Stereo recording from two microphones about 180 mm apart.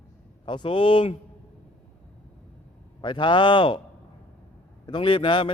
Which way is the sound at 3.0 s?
25° left (ahead or behind).